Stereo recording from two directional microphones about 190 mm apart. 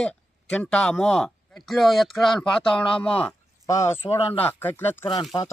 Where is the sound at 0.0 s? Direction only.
5° left (ahead or behind).